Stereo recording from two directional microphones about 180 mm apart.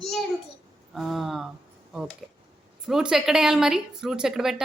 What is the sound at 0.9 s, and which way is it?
A man's voice, centre (ahead or behind).